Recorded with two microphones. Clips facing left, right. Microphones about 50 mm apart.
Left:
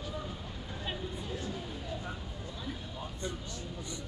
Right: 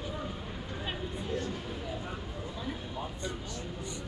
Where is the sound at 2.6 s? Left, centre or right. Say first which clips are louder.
Right 3 dB; centre.